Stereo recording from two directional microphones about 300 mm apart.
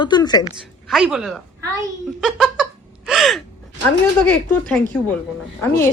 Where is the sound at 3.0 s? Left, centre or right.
Centre.